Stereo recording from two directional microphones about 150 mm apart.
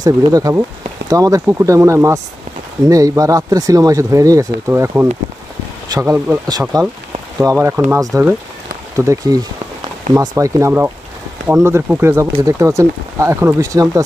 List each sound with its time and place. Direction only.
0.0 s speech: 25° right (ahead or behind)
6.7 s speech: 25° right (ahead or behind)